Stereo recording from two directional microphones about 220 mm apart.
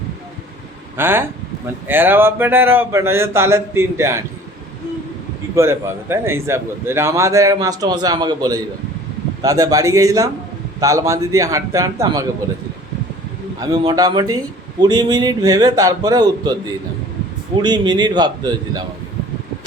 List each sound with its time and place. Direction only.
0.9 s a man's voice: 10° right (ahead or behind)
5.5 s a man's voice: 10° right (ahead or behind)
13.6 s a man's voice: 15° right (ahead or behind)
17.6 s speech: 20° right (ahead or behind)